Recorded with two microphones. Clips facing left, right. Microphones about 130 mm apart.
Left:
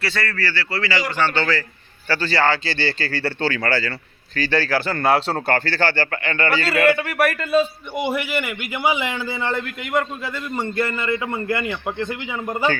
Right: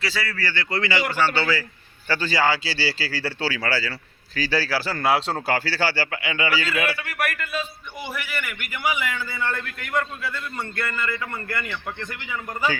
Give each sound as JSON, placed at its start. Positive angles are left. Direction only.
{"t": 0.0, "sound": "speech", "side_deg": -5}
{"t": 6.9, "sound": "a man's voice", "side_deg": 30}
{"t": 12.0, "sound": "a man's voice", "side_deg": 25}